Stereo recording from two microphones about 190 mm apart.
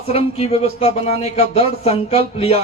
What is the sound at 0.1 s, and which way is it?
Speech, 30° left (ahead or behind).